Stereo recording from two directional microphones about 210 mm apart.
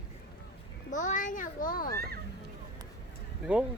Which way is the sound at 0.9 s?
35° left (ahead or behind).